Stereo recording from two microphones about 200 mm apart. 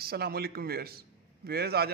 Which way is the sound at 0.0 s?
50° right (ahead or behind).